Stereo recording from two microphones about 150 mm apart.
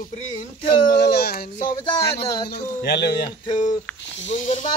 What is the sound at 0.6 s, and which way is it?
Speech, 90° left.